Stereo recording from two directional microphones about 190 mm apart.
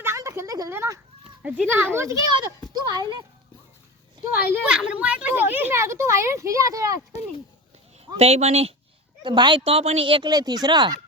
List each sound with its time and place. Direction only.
0.0 s a sound: 15° right (ahead or behind)
1.4 s a woman's voice: 5° right (ahead or behind); by 3.2 s 20° right (ahead or behind)
4.3 s a woman's voice: 10° right (ahead or behind)
7.1 s speech: 35° left (ahead or behind)
8.1 s speech: 35° right (ahead or behind)